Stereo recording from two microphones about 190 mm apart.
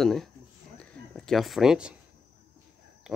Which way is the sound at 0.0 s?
Centre (ahead or behind).